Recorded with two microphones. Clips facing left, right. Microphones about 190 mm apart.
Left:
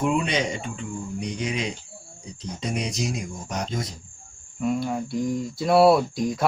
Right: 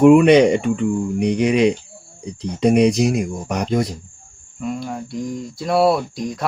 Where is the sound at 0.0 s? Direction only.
65° right (ahead or behind).